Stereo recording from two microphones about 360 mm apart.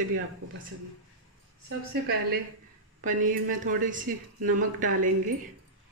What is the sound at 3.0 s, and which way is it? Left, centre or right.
A woman's voice, right.